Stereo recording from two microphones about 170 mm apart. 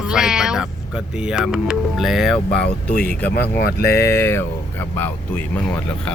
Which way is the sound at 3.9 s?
15° left (ahead or behind).